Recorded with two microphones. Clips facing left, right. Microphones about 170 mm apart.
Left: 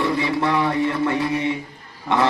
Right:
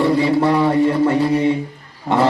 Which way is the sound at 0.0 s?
40° right (ahead or behind).